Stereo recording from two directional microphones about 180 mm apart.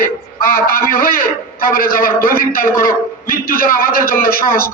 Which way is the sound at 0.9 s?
55° left (ahead or behind).